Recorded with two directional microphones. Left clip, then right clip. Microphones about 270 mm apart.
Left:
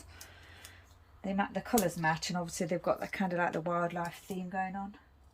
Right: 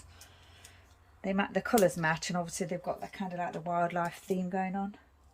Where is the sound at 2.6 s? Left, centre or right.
Centre.